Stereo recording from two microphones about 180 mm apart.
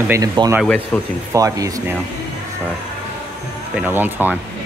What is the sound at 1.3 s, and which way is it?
Speech, 15° right (ahead or behind).